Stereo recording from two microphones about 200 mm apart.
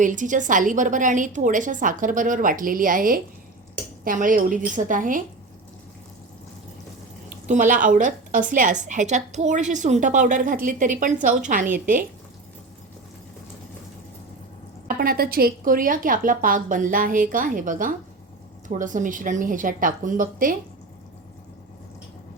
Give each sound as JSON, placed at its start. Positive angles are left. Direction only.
{"t": 0.0, "sound": "a woman's voice", "side_deg": -40}
{"t": 7.4, "sound": "a woman's voice", "side_deg": -40}
{"t": 14.8, "sound": "a woman's voice", "side_deg": -45}